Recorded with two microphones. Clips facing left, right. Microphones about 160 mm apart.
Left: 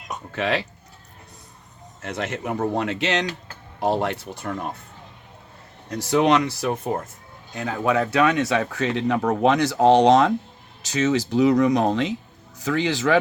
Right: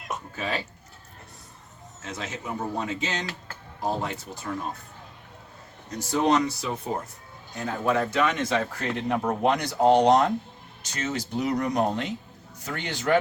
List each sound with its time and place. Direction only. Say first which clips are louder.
0.3 s speech: left 8 dB; 80° left
2.0 s speech: left 7 dB; 60° left (ahead or behind)
5.9 s speech: left 4 dB; 75° left (ahead or behind)